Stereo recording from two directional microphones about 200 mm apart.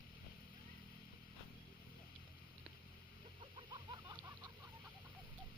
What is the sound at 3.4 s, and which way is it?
Chicken, 25° right (ahead or behind).